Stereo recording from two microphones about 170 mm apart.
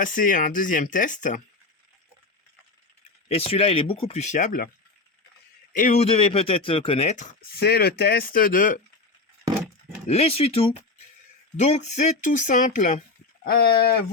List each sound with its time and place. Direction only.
0.0 s speech: 50° left (ahead or behind)
3.2 s speech: 35° left (ahead or behind); by 4.7 s 50° left (ahead or behind)
5.7 s speech: 45° left (ahead or behind)
7.5 s speech: 70° left (ahead or behind); by 8.8 s 50° left (ahead or behind)
10.1 s speech: 35° left (ahead or behind)
13.4 s speech: 65° left (ahead or behind)